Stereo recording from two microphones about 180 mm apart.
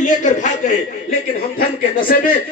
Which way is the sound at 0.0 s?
45° left (ahead or behind).